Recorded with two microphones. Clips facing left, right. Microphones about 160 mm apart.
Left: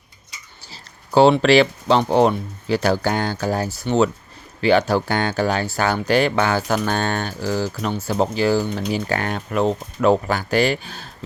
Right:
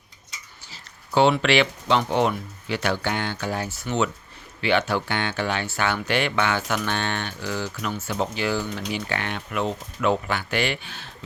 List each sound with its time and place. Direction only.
0.7 s speech: 35° left (ahead or behind)